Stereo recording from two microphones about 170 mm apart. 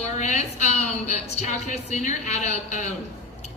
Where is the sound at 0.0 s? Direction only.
40° left (ahead or behind).